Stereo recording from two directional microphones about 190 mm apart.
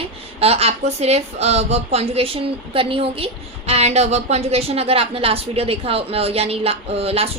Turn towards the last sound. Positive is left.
turn(degrees=-30)  # may be behind; listen again after turning